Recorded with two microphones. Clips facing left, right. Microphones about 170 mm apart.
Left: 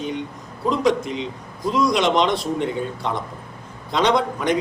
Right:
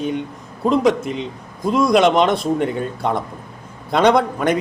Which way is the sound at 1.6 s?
55° right (ahead or behind).